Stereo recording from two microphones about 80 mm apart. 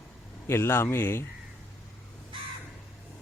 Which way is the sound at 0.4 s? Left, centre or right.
Left.